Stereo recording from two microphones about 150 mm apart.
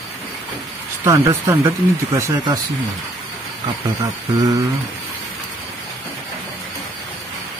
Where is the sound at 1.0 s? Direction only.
20° right (ahead or behind).